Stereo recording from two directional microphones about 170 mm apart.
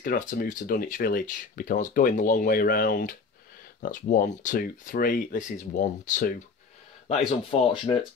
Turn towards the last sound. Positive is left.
turn(degrees=30)  # may be behind; listen again after turning